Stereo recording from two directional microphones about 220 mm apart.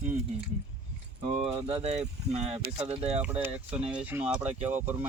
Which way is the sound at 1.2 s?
25° right (ahead or behind).